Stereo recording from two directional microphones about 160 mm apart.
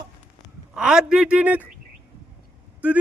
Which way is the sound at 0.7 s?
5° right (ahead or behind).